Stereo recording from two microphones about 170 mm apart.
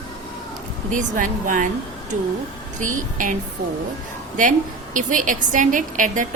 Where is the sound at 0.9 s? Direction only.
50° right (ahead or behind).